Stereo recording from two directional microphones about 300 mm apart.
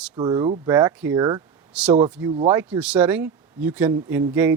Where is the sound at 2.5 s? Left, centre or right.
Centre.